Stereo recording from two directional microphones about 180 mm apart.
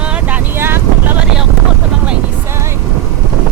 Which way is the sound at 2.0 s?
15° right (ahead or behind).